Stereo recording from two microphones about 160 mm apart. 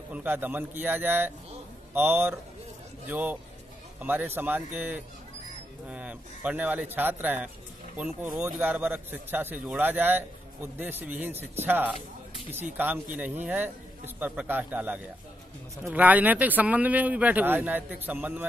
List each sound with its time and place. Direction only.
0.1 s speech: 10° right (ahead or behind)